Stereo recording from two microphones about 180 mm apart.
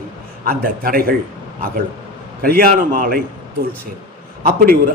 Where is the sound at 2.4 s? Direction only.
55° right (ahead or behind).